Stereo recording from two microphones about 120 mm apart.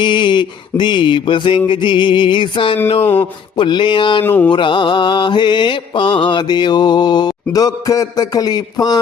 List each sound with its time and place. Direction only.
0.0 s mantra: 40° left (ahead or behind)
2.8 s a sound: 55° left (ahead or behind)
3.6 s mantra: 40° left (ahead or behind)
4.2 s music: 15° left (ahead or behind)
4.5 s mantra: 40° left (ahead or behind)